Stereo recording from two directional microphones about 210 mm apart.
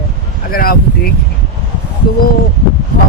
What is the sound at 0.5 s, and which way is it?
Speech, 45° left (ahead or behind).